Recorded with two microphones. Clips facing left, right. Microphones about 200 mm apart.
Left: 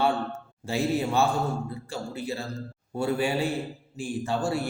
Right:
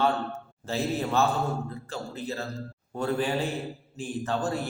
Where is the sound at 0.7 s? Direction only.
15° left (ahead or behind).